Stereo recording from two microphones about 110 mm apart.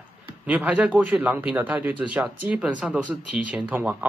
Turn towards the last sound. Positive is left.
turn(degrees=-15)  # may be behind; listen again after turning